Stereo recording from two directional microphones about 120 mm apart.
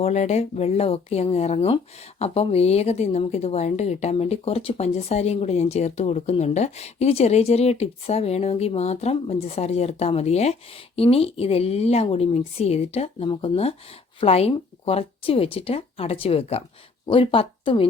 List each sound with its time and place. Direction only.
0.0 s speech: 70° left (ahead or behind)
13.2 s speech: 45° left (ahead or behind)